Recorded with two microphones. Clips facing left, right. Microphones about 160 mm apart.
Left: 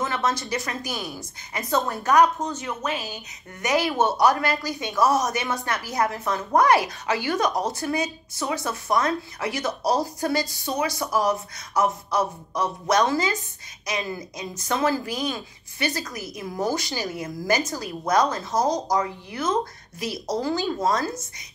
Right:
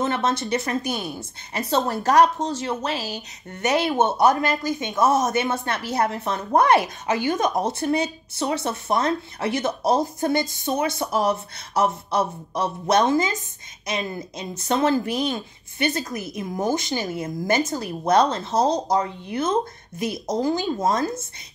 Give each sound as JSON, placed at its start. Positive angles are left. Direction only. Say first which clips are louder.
{"t": 0.0, "sound": "a woman's voice", "louder": "right 3 dB", "side_deg": -20}